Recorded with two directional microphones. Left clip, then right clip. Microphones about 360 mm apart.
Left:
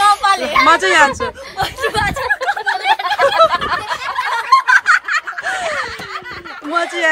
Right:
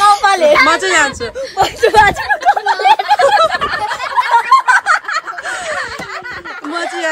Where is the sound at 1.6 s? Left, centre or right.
Right.